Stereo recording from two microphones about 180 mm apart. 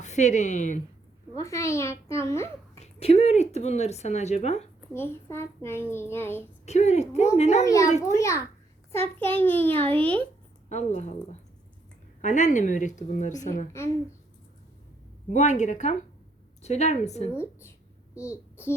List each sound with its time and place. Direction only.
0.0 s speech: 40° left (ahead or behind)
1.4 s a child's voice: 15° left (ahead or behind)
2.7 s speech: 35° left (ahead or behind)
4.9 s a child's voice: 15° left (ahead or behind)
6.7 s speech: 40° left (ahead or behind)
7.6 s a child's voice: 20° left (ahead or behind)
10.7 s a woman's voice: 40° left (ahead or behind)
15.3 s speech: 40° left (ahead or behind)
18.2 s a child's voice: 15° left (ahead or behind)